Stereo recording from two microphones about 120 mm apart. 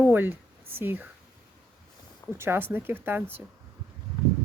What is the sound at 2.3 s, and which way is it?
Speech, 20° right (ahead or behind).